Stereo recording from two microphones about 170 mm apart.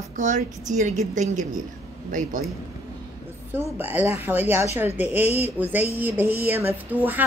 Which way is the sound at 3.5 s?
15° right (ahead or behind).